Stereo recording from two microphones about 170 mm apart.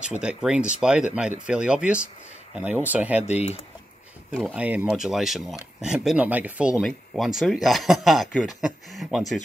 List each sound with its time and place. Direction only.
0.0 s speech: 5° right (ahead or behind)
3.3 s speech: 40° left (ahead or behind)
4.3 s speech: 5° left (ahead or behind)
4.6 s speech: 10° right (ahead or behind)